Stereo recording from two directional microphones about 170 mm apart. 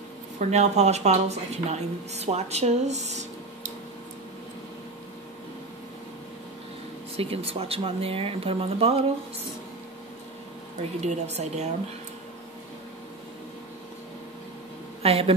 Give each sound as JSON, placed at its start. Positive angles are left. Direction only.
{"t": 0.4, "sound": "speech", "side_deg": -40}
{"t": 7.2, "sound": "speech", "side_deg": -35}
{"t": 11.0, "sound": "speech", "side_deg": -40}
{"t": 15.0, "sound": "speech", "side_deg": -35}